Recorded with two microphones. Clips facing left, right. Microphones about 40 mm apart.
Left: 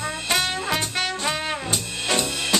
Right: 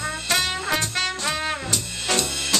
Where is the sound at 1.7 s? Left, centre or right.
Centre.